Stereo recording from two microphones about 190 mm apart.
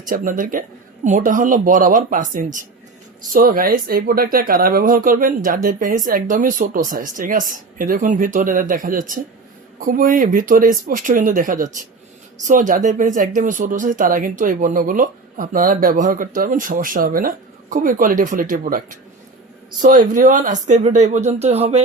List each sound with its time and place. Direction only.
0.0 s speech: 45° right (ahead or behind)